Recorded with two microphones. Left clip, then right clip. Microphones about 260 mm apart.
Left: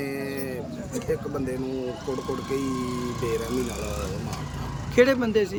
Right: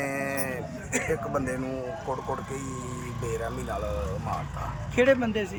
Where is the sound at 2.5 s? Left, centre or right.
Left.